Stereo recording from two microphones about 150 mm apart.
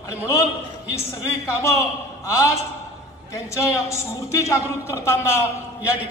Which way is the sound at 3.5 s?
20° left (ahead or behind).